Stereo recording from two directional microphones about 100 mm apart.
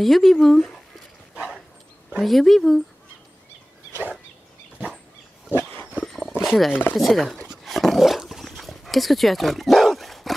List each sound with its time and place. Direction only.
0.0 s speech: centre (ahead or behind)
2.0 s speech: 5° right (ahead or behind)
5.6 s wild animals: 20° left (ahead or behind)
5.9 s dog: 5° left (ahead or behind)
6.4 s a sound: centre (ahead or behind)
6.7 s speech: 20° left (ahead or behind)
7.0 s speech: centre (ahead or behind)
7.6 s dog: centre (ahead or behind)